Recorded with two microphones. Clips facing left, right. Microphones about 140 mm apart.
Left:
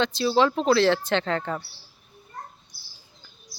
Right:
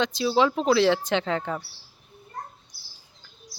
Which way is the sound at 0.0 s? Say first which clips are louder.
Left 1 dB; 10° right (ahead or behind).